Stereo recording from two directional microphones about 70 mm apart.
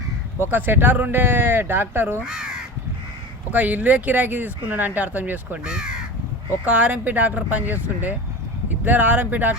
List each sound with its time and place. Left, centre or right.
0.4 s speech: right
2.2 s crow: centre
3.5 s speech: right
5.6 s speech: centre